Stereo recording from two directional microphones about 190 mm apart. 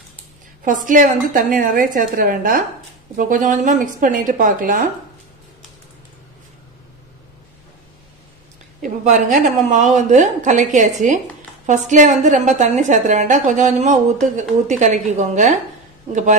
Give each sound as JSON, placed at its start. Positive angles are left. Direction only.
{"t": 0.7, "sound": "a woman's voice", "side_deg": -45}
{"t": 8.8, "sound": "a woman's voice", "side_deg": -45}